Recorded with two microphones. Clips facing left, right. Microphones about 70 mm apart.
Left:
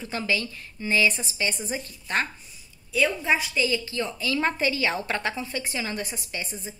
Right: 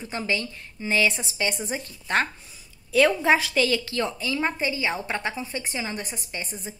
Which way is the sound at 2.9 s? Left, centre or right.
Right.